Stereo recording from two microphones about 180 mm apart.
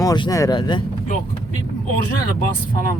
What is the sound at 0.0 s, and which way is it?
Speech, 20° left (ahead or behind).